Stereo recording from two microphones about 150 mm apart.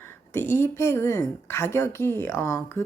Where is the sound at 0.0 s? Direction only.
15° left (ahead or behind).